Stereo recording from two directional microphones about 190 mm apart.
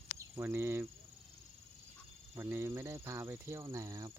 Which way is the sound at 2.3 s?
15° right (ahead or behind).